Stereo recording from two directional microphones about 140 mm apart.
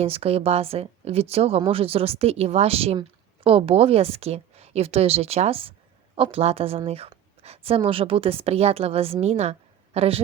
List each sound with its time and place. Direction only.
0.0 s speech: 45° right (ahead or behind)